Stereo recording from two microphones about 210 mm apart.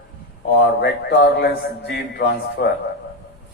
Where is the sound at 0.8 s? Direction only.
50° left (ahead or behind).